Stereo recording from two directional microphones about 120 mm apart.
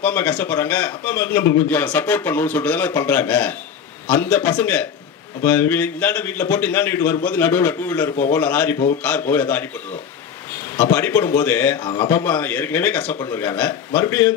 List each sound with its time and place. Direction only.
0.0 s a man's voice: 15° left (ahead or behind)
10.8 s a man's voice: 20° left (ahead or behind)